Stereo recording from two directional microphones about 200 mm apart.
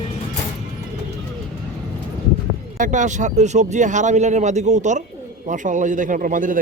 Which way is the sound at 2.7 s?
40° right (ahead or behind).